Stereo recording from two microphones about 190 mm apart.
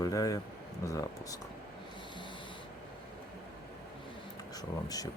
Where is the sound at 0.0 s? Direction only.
20° left (ahead or behind).